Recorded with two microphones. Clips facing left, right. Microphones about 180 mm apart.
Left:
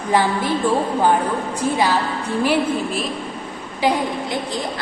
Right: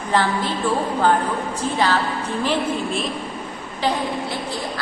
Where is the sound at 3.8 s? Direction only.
15° left (ahead or behind).